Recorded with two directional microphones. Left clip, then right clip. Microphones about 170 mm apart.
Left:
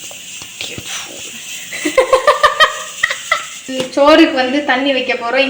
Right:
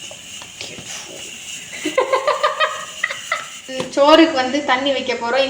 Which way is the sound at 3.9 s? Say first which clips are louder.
Left 3 dB; 15° left (ahead or behind).